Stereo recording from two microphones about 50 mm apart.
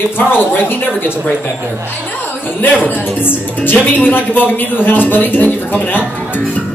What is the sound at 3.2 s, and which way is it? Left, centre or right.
A man's voice, left.